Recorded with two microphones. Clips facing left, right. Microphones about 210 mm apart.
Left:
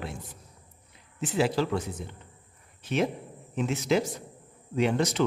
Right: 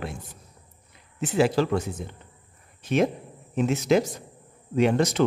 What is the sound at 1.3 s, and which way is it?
Speech, 45° right (ahead or behind).